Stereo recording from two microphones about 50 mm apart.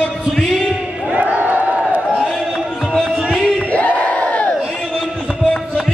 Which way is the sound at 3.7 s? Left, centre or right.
Left.